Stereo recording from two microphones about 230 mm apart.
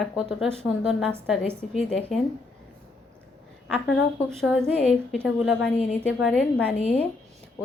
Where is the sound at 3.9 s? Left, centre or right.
Centre.